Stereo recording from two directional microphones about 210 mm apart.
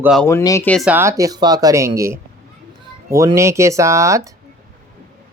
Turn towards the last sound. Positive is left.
turn(degrees=-15)  # may be behind; listen again after turning